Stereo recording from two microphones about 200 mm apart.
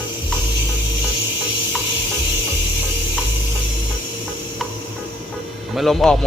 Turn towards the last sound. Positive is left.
turn(degrees=0)  # may be behind; listen again after turning